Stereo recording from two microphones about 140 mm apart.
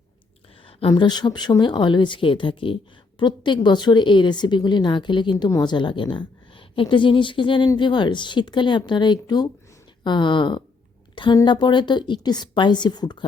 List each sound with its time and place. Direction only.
0.6 s a woman's voice: 40° left (ahead or behind)
11.1 s a sound: 35° left (ahead or behind)
11.3 s a woman's voice: 30° left (ahead or behind)